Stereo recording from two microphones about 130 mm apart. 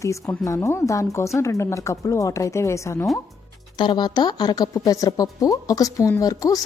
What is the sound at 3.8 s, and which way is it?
Speech, 35° left (ahead or behind).